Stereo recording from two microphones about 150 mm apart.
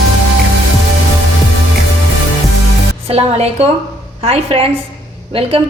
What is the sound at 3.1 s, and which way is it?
A woman's voice, 45° right (ahead or behind).